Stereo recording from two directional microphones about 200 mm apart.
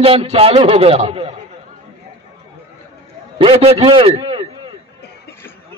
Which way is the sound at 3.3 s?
25° right (ahead or behind).